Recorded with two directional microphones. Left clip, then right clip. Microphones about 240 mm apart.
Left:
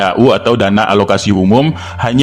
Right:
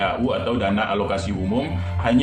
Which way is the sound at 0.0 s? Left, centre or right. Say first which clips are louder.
Left 12 dB; left.